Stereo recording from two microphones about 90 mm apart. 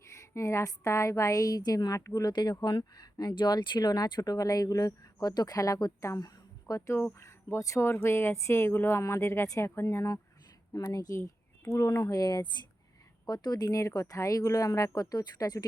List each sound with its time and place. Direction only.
0.2 s speech: 35° left (ahead or behind)
2.3 s speech: 50° left (ahead or behind)